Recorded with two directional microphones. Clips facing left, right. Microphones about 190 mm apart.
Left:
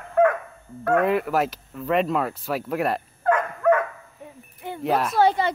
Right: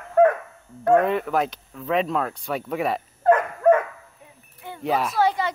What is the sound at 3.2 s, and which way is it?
Dog, 25° right (ahead or behind).